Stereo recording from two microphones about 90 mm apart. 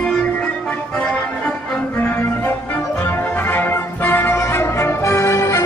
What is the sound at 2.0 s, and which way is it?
Music, 20° left (ahead or behind).